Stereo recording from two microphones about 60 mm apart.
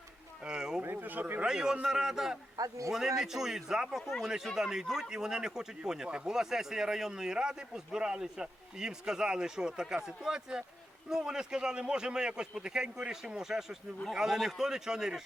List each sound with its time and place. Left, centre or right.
0.4 s a sound: centre
0.8 s speech: right
1.5 s speech: centre
2.6 s a man's voice: right
3.2 s speech: centre